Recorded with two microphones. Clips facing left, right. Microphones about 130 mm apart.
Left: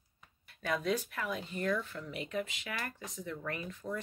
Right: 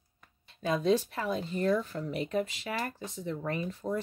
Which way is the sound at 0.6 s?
25° right (ahead or behind).